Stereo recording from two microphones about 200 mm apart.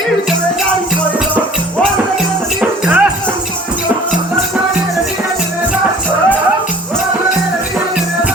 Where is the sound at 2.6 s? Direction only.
5° right (ahead or behind).